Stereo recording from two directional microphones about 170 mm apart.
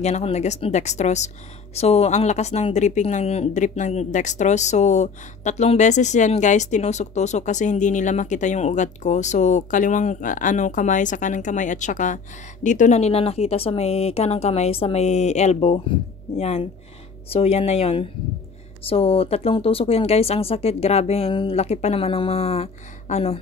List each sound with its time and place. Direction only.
0.0 s speech: 40° left (ahead or behind)